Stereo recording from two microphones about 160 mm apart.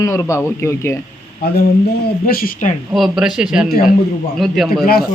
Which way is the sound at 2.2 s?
65° left (ahead or behind).